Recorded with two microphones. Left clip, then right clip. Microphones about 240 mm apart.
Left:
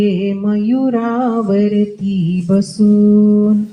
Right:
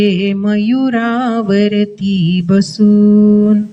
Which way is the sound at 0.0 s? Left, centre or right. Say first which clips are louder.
Right 2 dB; right.